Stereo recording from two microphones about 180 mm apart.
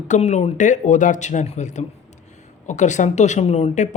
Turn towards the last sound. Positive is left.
turn(degrees=40)  # may be behind; listen again after turning